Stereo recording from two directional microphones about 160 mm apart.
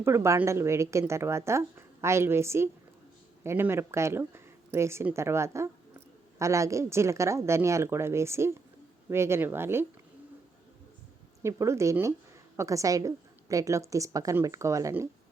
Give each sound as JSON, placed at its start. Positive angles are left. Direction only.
{"t": 0.0, "sound": "a woman's voice", "side_deg": -15}
{"t": 11.4, "sound": "a woman's voice", "side_deg": -20}